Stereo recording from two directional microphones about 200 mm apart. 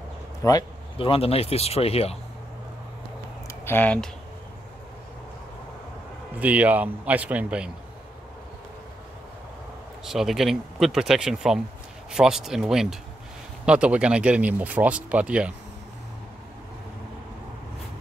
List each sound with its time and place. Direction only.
0.4 s speech: 20° left (ahead or behind)
3.4 s speech: 10° left (ahead or behind)
6.4 s speech: 10° right (ahead or behind)
10.0 s speech: centre (ahead or behind)